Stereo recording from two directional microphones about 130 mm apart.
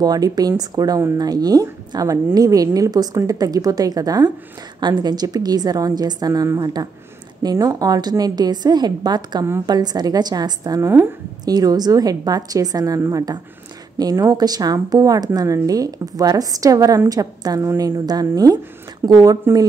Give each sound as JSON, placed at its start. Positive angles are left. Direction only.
{"t": 0.0, "sound": "a woman's voice", "side_deg": -30}
{"t": 10.8, "sound": "a woman's voice", "side_deg": -15}
{"t": 11.4, "sound": "a woman's voice", "side_deg": -30}